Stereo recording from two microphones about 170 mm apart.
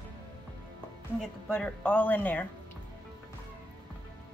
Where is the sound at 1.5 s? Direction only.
5° left (ahead or behind).